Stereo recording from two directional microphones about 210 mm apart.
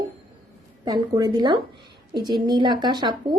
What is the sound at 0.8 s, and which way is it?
A woman's voice, 20° right (ahead or behind).